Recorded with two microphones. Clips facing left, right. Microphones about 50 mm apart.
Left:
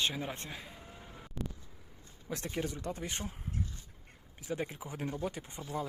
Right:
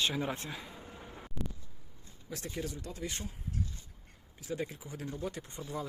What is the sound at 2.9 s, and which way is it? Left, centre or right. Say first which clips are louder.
Speech: even; left.